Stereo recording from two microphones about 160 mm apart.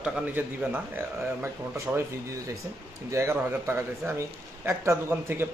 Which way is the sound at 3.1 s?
20° right (ahead or behind).